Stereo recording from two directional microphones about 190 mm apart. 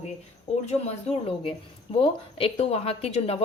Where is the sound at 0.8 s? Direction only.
30° left (ahead or behind).